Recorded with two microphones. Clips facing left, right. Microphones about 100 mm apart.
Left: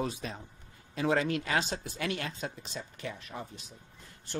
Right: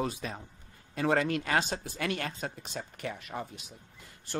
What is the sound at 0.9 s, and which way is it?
Speech, 50° right (ahead or behind).